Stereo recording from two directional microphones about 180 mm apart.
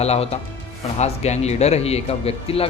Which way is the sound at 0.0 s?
35° left (ahead or behind).